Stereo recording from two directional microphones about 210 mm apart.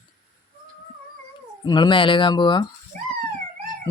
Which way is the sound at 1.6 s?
20° left (ahead or behind).